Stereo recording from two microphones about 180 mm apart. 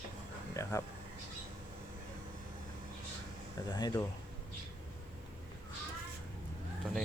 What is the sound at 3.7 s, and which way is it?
Speech, 20° left (ahead or behind).